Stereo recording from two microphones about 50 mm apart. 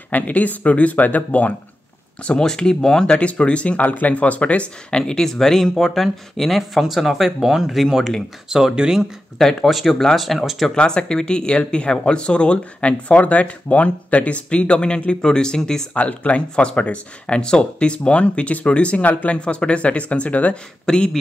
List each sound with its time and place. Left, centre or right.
0.1 s speech: left
2.2 s speech: centre
5.0 s speech: centre
8.5 s speech: centre
9.4 s speech: centre
9.7 s speech: centre
10.7 s speech: centre
15.9 s speech: left
20.8 s speech: centre